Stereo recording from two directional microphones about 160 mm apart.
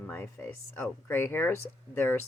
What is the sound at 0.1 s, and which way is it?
Speech, 15° left (ahead or behind).